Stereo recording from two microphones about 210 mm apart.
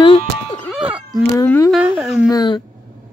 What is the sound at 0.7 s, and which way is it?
Cat, 5° right (ahead or behind).